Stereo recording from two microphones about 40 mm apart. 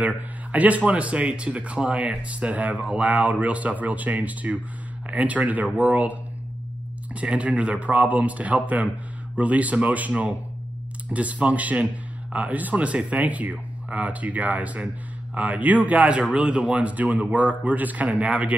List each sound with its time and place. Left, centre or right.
0.5 s speech: right
7.2 s speech: right
16.3 s speech: right